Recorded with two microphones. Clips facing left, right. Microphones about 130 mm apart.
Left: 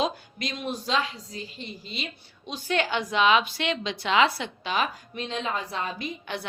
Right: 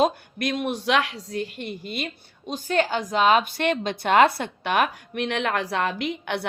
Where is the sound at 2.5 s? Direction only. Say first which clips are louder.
Right 4 dB; 45° right (ahead or behind).